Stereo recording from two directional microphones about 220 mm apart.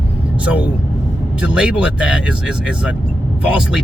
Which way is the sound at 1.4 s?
5° right (ahead or behind).